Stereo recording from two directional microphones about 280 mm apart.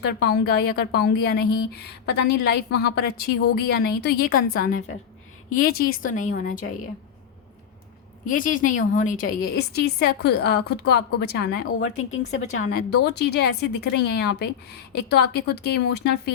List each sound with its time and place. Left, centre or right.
0.0 s a woman's voice: left
8.3 s a woman's voice: left
13.1 s a woman's voice: left